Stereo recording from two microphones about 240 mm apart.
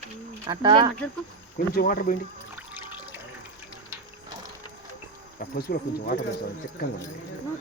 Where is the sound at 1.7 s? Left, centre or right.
Left.